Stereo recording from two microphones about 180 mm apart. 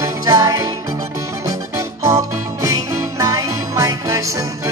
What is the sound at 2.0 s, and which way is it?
Music, 15° right (ahead or behind).